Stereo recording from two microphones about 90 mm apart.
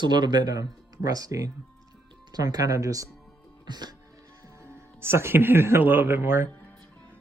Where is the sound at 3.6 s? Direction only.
50° right (ahead or behind).